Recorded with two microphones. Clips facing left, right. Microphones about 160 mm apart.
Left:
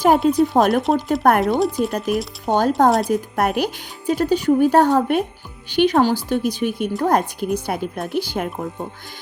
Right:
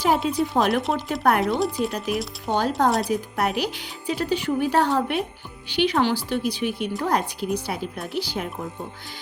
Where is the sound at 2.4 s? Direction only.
45° left (ahead or behind).